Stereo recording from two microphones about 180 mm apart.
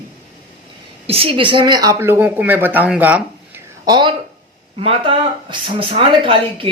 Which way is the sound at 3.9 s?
25° right (ahead or behind).